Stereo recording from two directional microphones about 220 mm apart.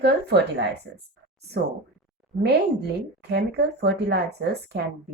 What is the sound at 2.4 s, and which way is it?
A woman's voice, 50° right (ahead or behind).